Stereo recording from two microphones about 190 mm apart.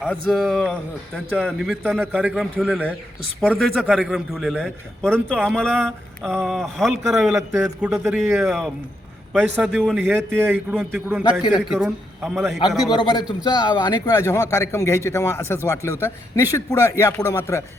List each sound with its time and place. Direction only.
0.1 s a man's voice: 5° left (ahead or behind)
11.2 s a man's voice: 20° left (ahead or behind)
11.7 s speech: centre (ahead or behind)
12.9 s a man's voice: 25° left (ahead or behind)